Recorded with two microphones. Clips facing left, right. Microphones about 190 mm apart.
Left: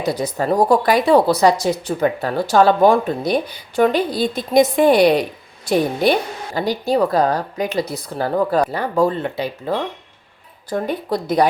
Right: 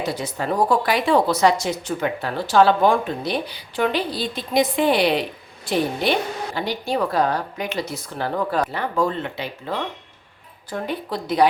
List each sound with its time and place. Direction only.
0.0 s speech: 40° left (ahead or behind)